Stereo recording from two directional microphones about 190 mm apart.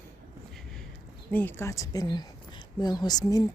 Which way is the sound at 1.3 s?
10° left (ahead or behind).